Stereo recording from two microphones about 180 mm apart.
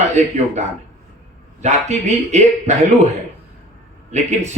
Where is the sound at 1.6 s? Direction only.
40° right (ahead or behind).